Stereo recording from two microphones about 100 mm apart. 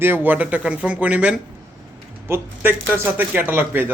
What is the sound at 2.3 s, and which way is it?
Speech, 25° right (ahead or behind).